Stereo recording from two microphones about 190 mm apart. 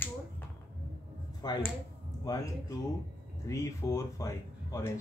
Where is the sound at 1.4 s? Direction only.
20° left (ahead or behind).